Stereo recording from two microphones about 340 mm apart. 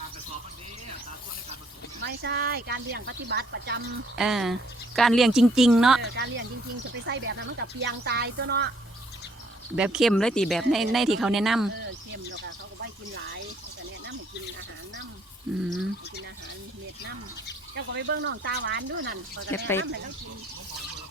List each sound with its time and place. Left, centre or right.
2.0 s speech: right
4.1 s speech: centre
6.0 s speech: right
9.7 s speech: centre
11.8 s speech: right
17.7 s speech: right
19.5 s speech: centre